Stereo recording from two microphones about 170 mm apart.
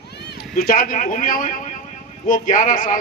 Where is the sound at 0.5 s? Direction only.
60° left (ahead or behind).